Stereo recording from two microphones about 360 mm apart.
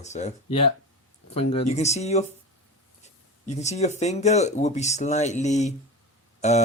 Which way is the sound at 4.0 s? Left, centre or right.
Centre.